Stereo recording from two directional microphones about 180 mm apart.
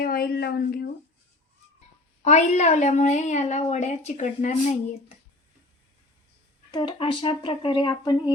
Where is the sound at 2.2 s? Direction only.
40° left (ahead or behind).